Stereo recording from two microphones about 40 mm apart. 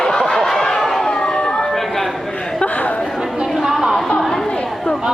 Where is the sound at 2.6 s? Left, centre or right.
Left.